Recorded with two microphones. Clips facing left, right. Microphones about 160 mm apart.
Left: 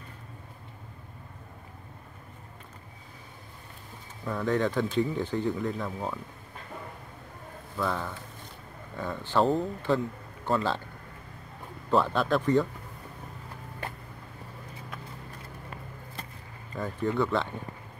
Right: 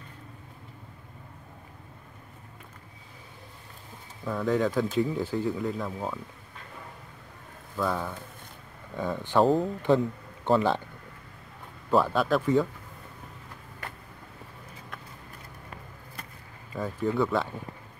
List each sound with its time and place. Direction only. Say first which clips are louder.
4.2 s speech: right 1 dB; centre (ahead or behind)
7.7 s speech: right 2 dB; 5° right (ahead or behind)
8.9 s speech: right 3 dB; 15° right (ahead or behind)
11.9 s speech: right 1 dB; 5° right (ahead or behind)
16.7 s speech: right 1 dB; 5° right (ahead or behind)